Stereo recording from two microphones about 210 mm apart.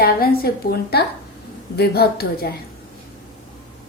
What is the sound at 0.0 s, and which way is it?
A woman's voice, 45° left (ahead or behind).